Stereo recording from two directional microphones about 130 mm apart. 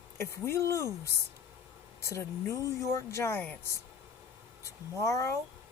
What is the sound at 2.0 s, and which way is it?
Speech, 20° left (ahead or behind).